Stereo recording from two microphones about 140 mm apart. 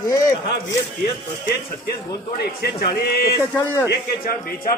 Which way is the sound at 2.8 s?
90° left.